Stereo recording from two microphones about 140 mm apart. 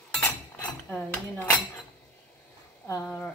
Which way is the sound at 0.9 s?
10° left (ahead or behind).